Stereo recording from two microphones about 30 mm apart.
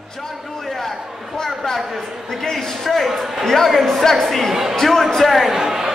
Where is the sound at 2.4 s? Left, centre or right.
Centre.